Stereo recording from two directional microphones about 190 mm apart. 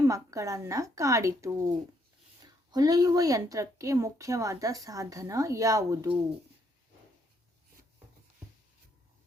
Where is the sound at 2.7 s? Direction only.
20° right (ahead or behind).